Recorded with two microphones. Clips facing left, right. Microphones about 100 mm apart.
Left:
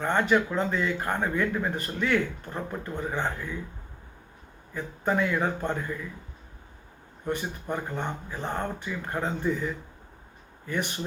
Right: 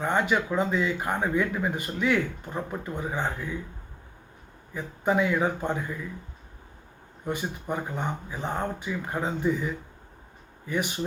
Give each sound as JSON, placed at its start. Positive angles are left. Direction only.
{"t": 0.0, "sound": "speech", "side_deg": -10}
{"t": 4.7, "sound": "speech", "side_deg": -10}
{"t": 7.3, "sound": "speech", "side_deg": -10}